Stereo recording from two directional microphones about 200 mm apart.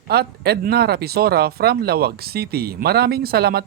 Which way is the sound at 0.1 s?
50° right (ahead or behind).